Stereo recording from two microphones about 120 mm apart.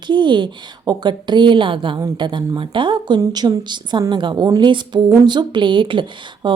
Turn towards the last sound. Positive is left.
turn(degrees=-40)  # may be behind; listen again after turning